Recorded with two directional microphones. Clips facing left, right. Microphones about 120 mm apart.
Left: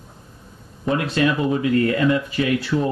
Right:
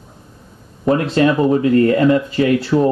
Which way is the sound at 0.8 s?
35° right (ahead or behind).